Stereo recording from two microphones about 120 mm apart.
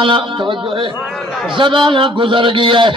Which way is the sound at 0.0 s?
45° right (ahead or behind).